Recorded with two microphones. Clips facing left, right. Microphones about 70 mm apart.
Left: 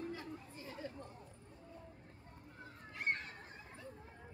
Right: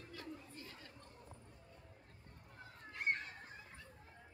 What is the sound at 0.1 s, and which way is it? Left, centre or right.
Chatter, centre.